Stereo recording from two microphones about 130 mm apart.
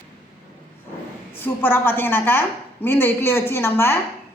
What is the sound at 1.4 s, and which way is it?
A woman's voice, 15° left (ahead or behind).